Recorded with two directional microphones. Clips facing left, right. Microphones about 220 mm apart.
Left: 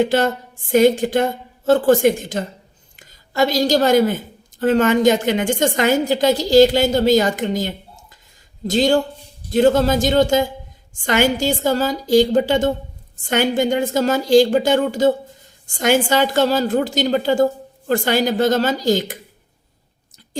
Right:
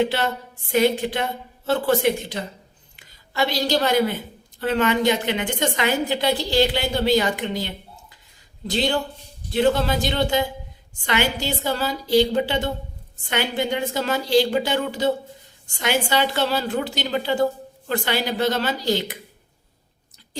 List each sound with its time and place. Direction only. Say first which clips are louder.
0.0 s a woman's voice: left 5 dB; 45° left (ahead or behind)